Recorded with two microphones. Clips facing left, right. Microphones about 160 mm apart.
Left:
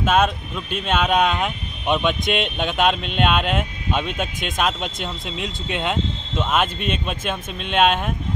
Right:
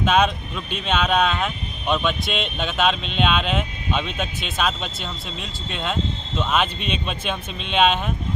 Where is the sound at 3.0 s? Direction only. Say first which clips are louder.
Left 1 dB; 55° left (ahead or behind).